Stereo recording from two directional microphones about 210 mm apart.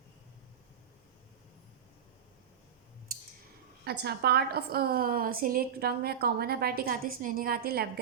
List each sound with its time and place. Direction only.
3.8 s a woman's voice: 50° right (ahead or behind)